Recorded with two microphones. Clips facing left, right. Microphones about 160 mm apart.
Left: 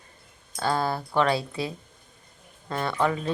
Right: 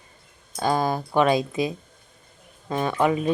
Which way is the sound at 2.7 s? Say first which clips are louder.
Right 4 dB; 15° right (ahead or behind).